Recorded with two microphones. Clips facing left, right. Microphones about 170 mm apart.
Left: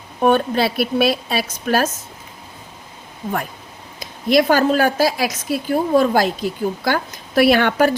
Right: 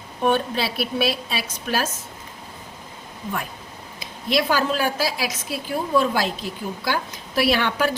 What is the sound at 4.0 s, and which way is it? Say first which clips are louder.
A woman's voice: left 7 dB; 50° left (ahead or behind).